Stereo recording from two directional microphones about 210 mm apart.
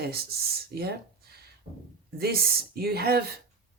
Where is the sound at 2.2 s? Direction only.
45° right (ahead or behind).